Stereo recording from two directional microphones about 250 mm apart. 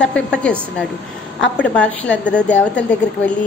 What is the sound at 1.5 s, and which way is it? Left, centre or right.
A woman's voice, centre.